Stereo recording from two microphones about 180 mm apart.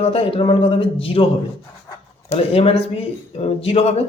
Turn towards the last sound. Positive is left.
turn(degrees=35)  # may be behind; listen again after turning